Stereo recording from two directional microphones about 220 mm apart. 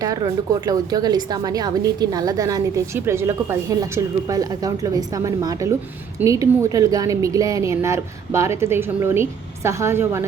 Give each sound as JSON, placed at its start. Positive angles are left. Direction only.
{"t": 0.0, "sound": "a woman's voice", "side_deg": -15}